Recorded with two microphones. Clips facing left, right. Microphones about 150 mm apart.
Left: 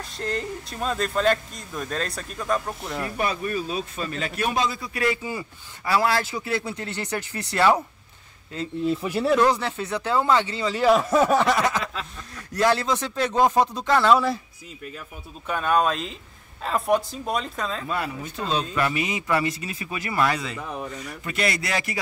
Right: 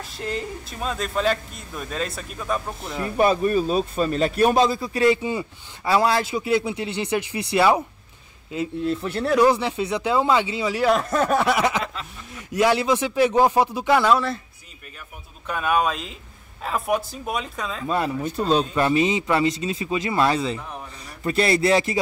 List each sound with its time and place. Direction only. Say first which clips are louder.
0.0 s speech: even; 5° right (ahead or behind)
3.2 s a man's voice: right 9 dB; 35° right (ahead or behind); by 7.8 s 10° right (ahead or behind)
8.8 s speech: left 3 dB; 5° left (ahead or behind)
9.4 s speech: right 3 dB; 15° right (ahead or behind); by 11.3 s 5° left (ahead or behind)
11.3 s a sound: right 1 dB; 10° right (ahead or behind)
12.4 s speech: right 2 dB; 15° right (ahead or behind)
14.1 s speech: left 1 dB; 5° left (ahead or behind)
15.4 s speech: even; 5° right (ahead or behind)
17.8 s speech: right 5 dB; 25° right (ahead or behind)